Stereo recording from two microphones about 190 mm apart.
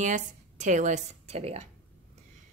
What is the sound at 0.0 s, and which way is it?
Speech, 40° right (ahead or behind).